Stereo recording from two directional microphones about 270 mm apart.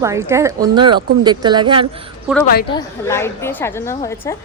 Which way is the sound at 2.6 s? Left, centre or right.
Centre.